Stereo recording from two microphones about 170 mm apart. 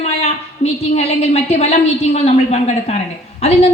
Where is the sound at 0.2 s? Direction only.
40° left (ahead or behind).